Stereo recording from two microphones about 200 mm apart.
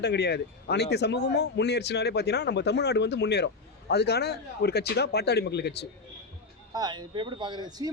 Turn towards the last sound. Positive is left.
turn(degrees=-20)  # may be behind; listen again after turning